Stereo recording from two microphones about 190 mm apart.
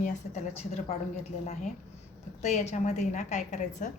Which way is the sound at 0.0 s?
35° left (ahead or behind).